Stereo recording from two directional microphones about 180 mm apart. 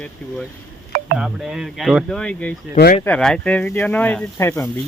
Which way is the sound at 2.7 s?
55° left (ahead or behind).